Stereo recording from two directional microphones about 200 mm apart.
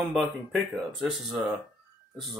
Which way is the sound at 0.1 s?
Centre (ahead or behind).